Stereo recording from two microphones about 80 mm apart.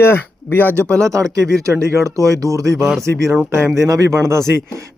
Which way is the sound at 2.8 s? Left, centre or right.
Centre.